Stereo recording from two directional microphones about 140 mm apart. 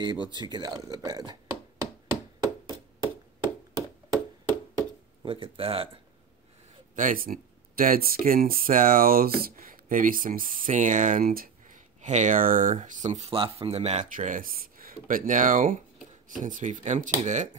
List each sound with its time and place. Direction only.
0.0 s speech: 30° right (ahead or behind)
5.2 s speech: 40° right (ahead or behind)
7.0 s speech: 80° right; by 13.3 s 55° right (ahead or behind)
13.3 s speech: 40° right (ahead or behind)
14.1 s speech: 70° right (ahead or behind)